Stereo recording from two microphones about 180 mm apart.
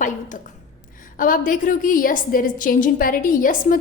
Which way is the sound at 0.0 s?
45° left (ahead or behind).